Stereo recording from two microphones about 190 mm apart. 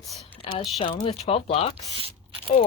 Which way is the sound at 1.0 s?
30° left (ahead or behind).